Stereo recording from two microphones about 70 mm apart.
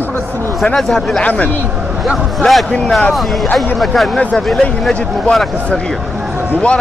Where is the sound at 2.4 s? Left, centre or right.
Centre.